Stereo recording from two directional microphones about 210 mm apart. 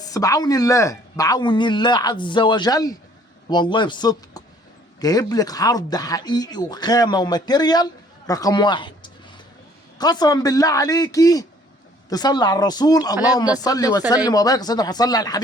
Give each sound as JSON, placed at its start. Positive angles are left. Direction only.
{"t": 0.0, "sound": "speech", "side_deg": 15}
{"t": 10.0, "sound": "speech", "side_deg": 20}